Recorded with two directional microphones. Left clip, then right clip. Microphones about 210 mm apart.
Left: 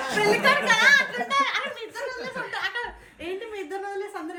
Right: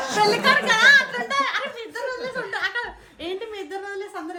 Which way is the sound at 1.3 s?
45° right (ahead or behind).